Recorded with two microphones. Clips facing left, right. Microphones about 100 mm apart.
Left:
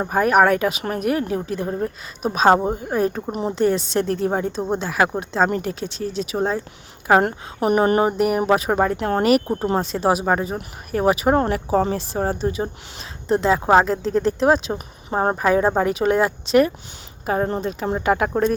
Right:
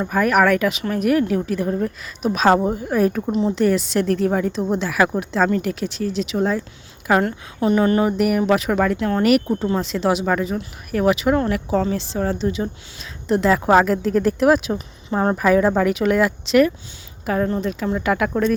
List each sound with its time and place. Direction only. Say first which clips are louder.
0.0 s speech: left 1 dB; 35° left (ahead or behind)
5.6 s speech: right 3 dB; 35° left (ahead or behind)
11.9 s a woman's voice: even; 45° left (ahead or behind)